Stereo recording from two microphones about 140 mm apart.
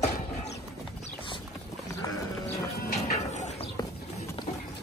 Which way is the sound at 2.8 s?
75° left (ahead or behind).